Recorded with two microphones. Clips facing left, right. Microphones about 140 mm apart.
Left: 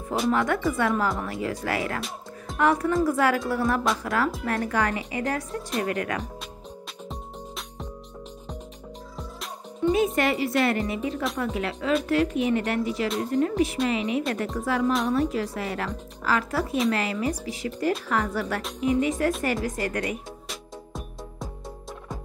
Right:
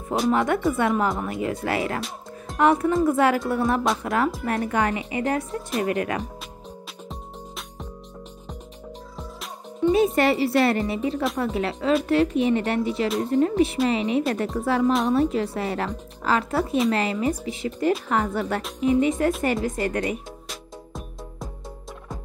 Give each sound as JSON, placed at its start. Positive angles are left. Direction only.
{"t": 0.3, "sound": "speech", "side_deg": -25}
{"t": 9.9, "sound": "a woman's voice", "side_deg": -35}
{"t": 20.4, "sound": "music", "side_deg": 0}